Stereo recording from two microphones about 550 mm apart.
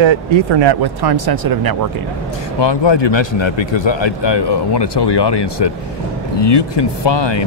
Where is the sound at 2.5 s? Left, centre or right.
Left.